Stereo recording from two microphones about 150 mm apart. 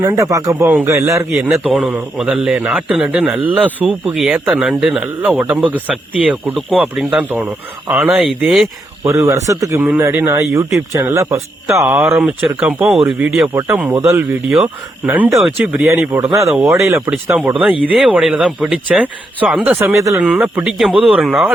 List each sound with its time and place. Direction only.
0.0 s speech: 20° right (ahead or behind)
1.5 s a man's voice: 5° right (ahead or behind)
9.0 s a man's voice: 20° right (ahead or behind)
12.0 s a man's voice: 5° right (ahead or behind)
13.5 s a man's voice: 20° right (ahead or behind); by 19.8 s centre (ahead or behind)
19.8 s speech: 20° right (ahead or behind)
20.1 s speech: 10° right (ahead or behind)